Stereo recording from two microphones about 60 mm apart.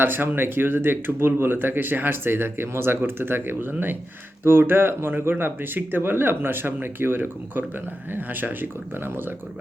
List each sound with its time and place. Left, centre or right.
0.0 s speech: right